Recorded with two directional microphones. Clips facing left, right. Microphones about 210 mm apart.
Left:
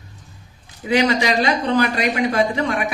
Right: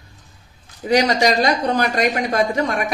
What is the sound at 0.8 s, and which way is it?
Speech, 40° right (ahead or behind).